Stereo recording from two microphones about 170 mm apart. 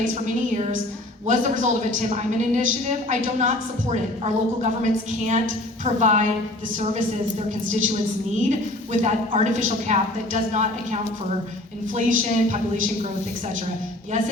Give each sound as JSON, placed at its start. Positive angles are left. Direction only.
{"t": 0.0, "sound": "a woman's voice", "side_deg": -45}
{"t": 8.4, "sound": "a woman's voice", "side_deg": -45}